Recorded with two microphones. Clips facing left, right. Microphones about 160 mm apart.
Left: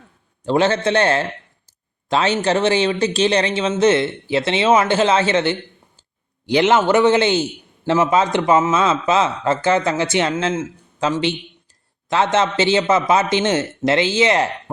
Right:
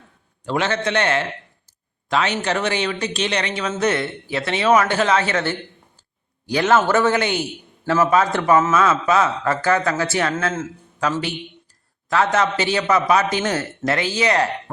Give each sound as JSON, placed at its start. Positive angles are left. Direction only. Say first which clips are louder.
{"t": 0.4, "sound": "a man's voice", "louder": "left 5 dB", "side_deg": 30}